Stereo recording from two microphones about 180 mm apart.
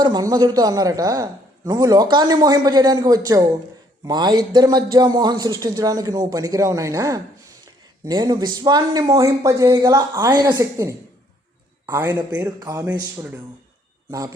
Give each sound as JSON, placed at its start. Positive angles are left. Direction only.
{"t": 0.0, "sound": "a man's voice", "side_deg": -20}